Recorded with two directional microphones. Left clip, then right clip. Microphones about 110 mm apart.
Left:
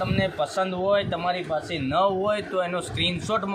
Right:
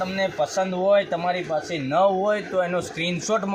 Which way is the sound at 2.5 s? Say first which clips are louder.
Right 3 dB; 60° right (ahead or behind).